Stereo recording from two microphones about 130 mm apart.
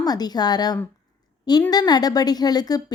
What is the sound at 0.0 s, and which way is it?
Speech, 30° left (ahead or behind).